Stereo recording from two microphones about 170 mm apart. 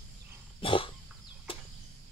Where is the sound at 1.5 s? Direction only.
30° left (ahead or behind).